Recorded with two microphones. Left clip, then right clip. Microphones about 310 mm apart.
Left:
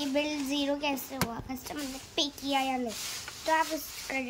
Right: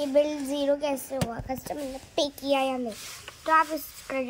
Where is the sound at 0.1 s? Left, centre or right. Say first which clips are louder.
Right 8 dB; centre.